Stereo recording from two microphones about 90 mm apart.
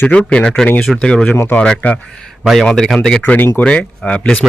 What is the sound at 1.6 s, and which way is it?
Speech, 15° left (ahead or behind).